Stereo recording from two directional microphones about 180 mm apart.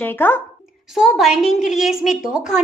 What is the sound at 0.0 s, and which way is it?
Speech, 10° left (ahead or behind).